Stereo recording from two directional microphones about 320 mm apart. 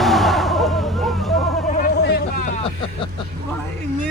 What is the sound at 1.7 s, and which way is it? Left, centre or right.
Vehicle, left.